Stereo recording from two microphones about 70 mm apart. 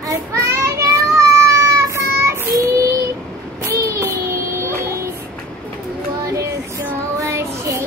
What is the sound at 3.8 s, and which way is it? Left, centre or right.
Child singing, right.